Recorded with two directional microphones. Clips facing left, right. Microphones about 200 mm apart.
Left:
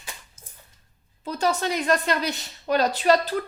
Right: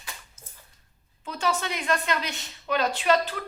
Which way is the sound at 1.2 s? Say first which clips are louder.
Left 4 dB; 40° left (ahead or behind).